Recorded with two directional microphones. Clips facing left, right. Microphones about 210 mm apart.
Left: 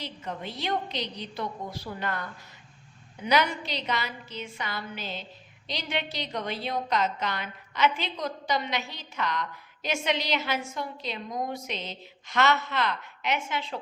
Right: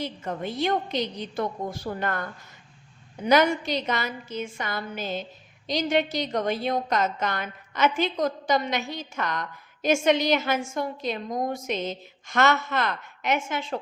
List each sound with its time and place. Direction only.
0.0 s a woman's voice: 50° right (ahead or behind)